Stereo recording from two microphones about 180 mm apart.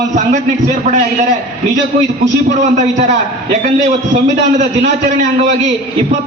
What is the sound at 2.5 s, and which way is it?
Speech, 40° right (ahead or behind).